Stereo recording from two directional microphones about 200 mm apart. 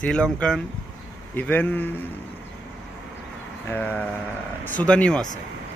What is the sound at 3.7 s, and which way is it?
A man's voice, 10° left (ahead or behind).